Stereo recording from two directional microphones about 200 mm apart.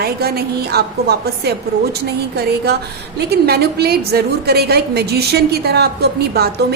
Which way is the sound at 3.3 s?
55° right (ahead or behind).